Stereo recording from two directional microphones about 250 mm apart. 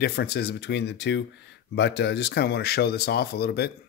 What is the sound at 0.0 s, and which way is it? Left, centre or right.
Speech, left.